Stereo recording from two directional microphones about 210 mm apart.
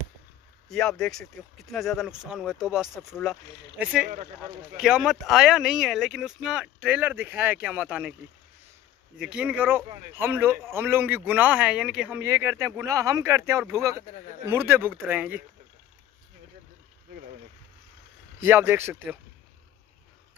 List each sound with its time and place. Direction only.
0.7 s speech: 5° left (ahead or behind)
9.2 s speech: 5° right (ahead or behind)
18.4 s speech: 10° right (ahead or behind)